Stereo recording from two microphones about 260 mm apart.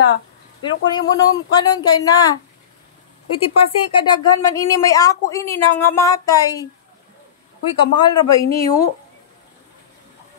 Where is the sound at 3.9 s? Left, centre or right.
Centre.